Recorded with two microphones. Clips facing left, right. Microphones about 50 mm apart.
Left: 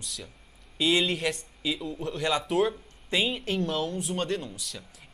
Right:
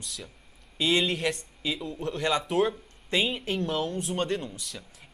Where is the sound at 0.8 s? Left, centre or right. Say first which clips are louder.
Even; centre.